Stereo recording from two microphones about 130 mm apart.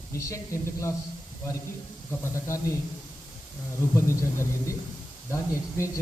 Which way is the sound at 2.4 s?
25° left (ahead or behind).